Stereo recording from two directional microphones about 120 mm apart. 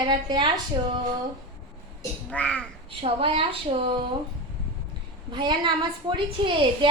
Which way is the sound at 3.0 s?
50° right (ahead or behind).